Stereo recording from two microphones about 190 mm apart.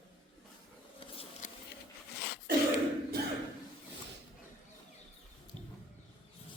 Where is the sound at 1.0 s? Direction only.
30° left (ahead or behind).